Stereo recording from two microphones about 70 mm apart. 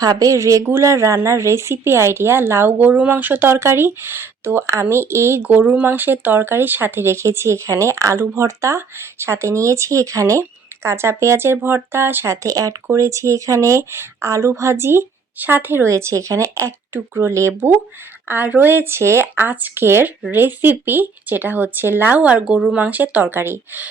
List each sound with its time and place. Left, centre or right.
0.0 s speech: right
2.7 s speech: right
3.6 s speech: right
5.4 s speech: right
18.3 s speech: right